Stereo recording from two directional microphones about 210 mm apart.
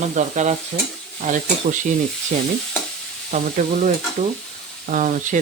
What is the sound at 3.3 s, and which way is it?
Speech, 35° right (ahead or behind).